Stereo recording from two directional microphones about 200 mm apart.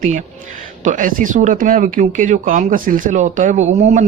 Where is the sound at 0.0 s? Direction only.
35° right (ahead or behind).